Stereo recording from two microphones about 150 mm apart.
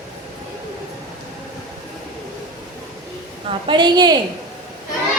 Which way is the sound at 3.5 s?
35° right (ahead or behind).